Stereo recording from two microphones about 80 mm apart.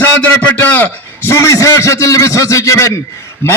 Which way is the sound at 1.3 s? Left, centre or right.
Left.